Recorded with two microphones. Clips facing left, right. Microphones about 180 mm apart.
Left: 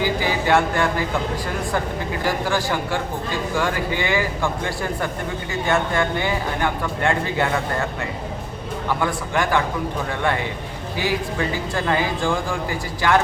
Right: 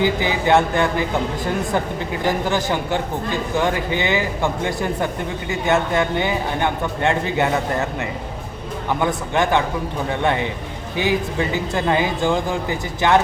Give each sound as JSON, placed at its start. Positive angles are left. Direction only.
{"t": 0.0, "sound": "speech", "side_deg": -20}
{"t": 2.2, "sound": "speech", "side_deg": -20}
{"t": 8.9, "sound": "speech", "side_deg": -20}